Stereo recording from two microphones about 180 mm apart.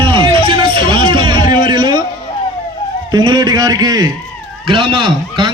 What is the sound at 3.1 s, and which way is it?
A man's voice, 25° right (ahead or behind).